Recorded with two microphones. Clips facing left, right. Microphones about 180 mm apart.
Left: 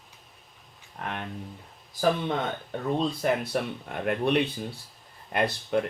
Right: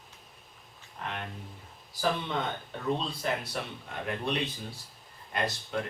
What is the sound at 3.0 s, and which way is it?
Speech, 55° left (ahead or behind).